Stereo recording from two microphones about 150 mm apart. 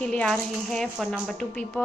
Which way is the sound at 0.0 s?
5° left (ahead or behind).